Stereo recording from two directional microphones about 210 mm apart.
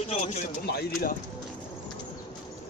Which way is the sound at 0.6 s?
50° left (ahead or behind).